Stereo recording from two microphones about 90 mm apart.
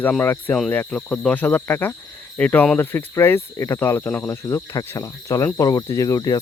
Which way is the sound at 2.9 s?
25° left (ahead or behind).